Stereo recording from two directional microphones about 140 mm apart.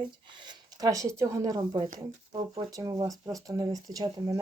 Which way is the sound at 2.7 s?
25° right (ahead or behind).